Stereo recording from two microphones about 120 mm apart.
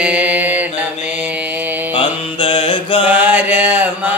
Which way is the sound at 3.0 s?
15° right (ahead or behind).